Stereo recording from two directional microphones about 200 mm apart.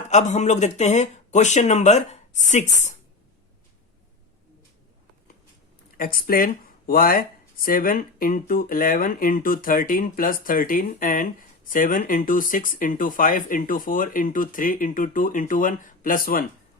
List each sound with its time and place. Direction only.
0.1 s speech: 35° left (ahead or behind)
6.0 s speech: 45° left (ahead or behind)